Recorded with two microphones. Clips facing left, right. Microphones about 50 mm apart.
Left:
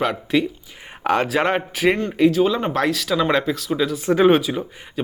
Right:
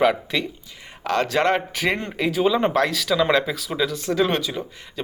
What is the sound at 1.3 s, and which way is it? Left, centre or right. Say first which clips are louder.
Speech: even; centre.